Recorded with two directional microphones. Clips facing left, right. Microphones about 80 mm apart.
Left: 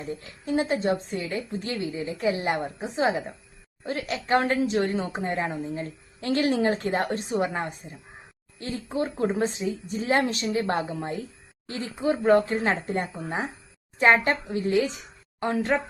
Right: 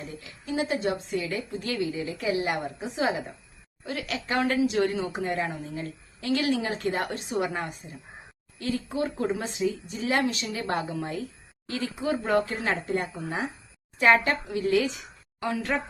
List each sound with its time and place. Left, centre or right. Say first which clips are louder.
0.0 s a woman's voice: left 5 dB; left